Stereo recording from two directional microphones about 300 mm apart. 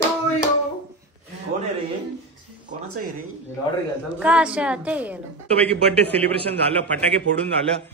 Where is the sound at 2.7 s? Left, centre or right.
Right.